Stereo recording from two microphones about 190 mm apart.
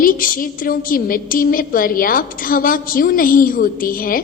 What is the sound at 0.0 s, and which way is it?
A woman's voice, 45° left (ahead or behind).